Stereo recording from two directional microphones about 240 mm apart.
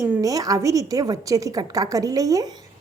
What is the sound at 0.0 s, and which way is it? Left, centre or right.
A woman's voice, centre.